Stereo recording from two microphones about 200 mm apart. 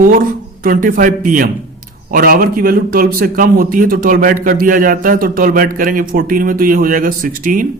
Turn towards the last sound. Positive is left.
turn(degrees=-45)  # may be behind; listen again after turning